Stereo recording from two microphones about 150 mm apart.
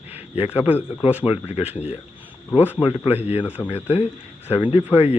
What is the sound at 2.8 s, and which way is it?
Speech, 40° left (ahead or behind).